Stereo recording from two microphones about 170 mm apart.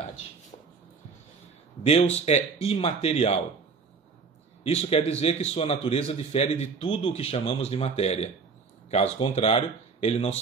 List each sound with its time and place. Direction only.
1.8 s a man's voice: 40° left (ahead or behind)
4.6 s a man's voice: 35° left (ahead or behind)